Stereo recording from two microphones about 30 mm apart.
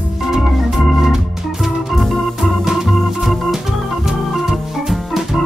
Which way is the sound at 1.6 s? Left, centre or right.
Centre.